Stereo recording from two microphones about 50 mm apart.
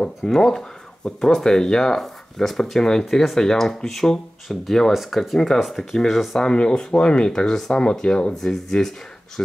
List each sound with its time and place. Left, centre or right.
0.0 s speech: centre
6.4 s speech: centre
8.4 s speech: centre